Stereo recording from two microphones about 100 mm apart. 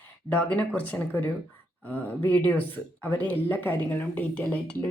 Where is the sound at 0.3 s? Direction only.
15° left (ahead or behind).